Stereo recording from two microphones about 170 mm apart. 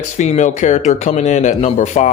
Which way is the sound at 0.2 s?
45° left (ahead or behind).